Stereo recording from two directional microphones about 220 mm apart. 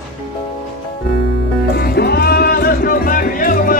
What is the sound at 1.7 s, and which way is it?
Music, 45° left (ahead or behind).